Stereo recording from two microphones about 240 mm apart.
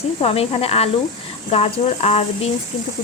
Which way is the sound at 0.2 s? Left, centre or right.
Left.